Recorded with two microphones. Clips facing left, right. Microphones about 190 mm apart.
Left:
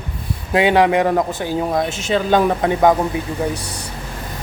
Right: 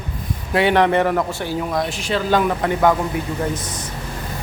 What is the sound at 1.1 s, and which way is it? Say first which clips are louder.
Speech: left 2 dB; 20° left (ahead or behind).